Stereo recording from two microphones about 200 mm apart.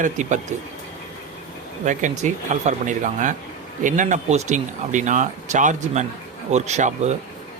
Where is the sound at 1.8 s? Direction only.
40° right (ahead or behind).